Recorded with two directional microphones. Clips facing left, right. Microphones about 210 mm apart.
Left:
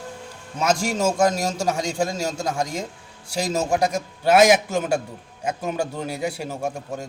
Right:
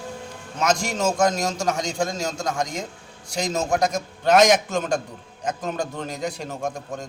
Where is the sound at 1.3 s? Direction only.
30° left (ahead or behind).